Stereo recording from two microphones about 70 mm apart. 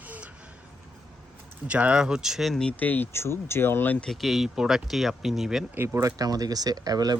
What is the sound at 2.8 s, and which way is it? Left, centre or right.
Speech, left.